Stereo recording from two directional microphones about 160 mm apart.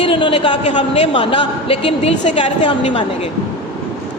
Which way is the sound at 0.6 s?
45° left (ahead or behind).